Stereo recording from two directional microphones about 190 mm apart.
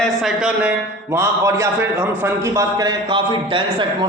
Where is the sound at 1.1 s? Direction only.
15° right (ahead or behind).